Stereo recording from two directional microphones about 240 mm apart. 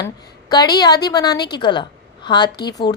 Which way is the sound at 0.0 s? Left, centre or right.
Centre.